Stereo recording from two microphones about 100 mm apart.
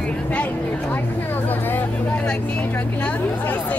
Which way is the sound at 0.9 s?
20° left (ahead or behind).